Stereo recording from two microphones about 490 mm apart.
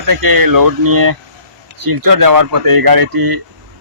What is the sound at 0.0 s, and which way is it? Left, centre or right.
A man's voice, right.